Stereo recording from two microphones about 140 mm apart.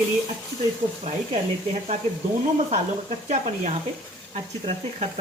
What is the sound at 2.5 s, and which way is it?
Speech, 50° right (ahead or behind).